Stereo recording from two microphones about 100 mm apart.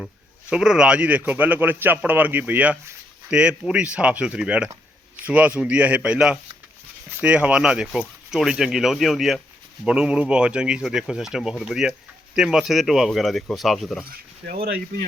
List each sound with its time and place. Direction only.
0.5 s a man's voice: 5° right (ahead or behind)